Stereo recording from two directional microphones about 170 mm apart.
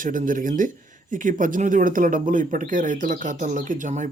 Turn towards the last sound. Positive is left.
turn(degrees=-50)  # may be behind; listen again after turning